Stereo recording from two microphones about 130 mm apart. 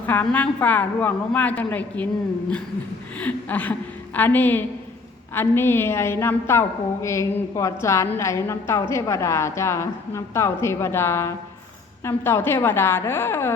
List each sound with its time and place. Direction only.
0.0 s a woman's voice: 15° left (ahead or behind)
3.2 s a woman's voice: 10° left (ahead or behind)